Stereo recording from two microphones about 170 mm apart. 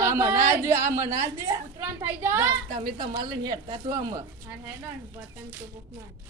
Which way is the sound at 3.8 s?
20° right (ahead or behind).